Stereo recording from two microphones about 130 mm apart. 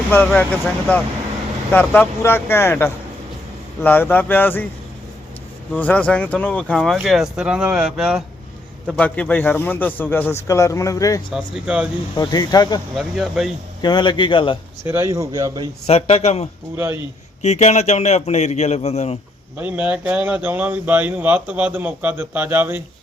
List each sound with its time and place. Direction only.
0.1 s speech: 10° left (ahead or behind)
1.7 s speech: 15° left (ahead or behind)
5.7 s speech: 10° left (ahead or behind); by 8.2 s 5° right (ahead or behind)
9.0 s speech: 10° left (ahead or behind); by 11.2 s 25° left (ahead or behind)
11.3 s speech: 5° right (ahead or behind)
12.1 s a man's voice: 30° left (ahead or behind)
13.0 s speech: centre (ahead or behind)
13.8 s a man's voice: 35° left (ahead or behind)
14.8 s speech: 20° right (ahead or behind)
15.9 s speech: 50° left (ahead or behind)
16.7 s speech: 20° right (ahead or behind)
17.4 s speech: 60° left (ahead or behind)
19.5 s speech: 10° right (ahead or behind)